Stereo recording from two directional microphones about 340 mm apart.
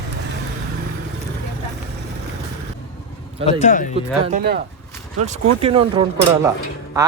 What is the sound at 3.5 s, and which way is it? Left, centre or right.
Speech, left.